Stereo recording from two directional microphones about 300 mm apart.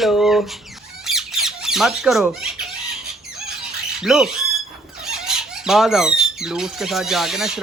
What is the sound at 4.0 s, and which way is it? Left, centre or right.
Speech, centre.